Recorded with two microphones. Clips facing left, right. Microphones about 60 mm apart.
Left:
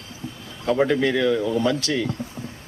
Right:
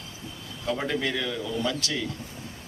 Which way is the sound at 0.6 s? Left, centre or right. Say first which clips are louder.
Left 8 dB; left.